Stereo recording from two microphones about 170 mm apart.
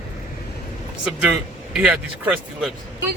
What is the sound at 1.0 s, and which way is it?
Speech, 5° right (ahead or behind).